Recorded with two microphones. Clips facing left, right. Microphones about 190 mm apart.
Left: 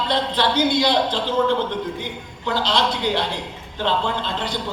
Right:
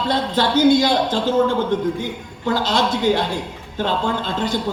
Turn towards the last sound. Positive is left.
turn(degrees=-45)  # may be behind; listen again after turning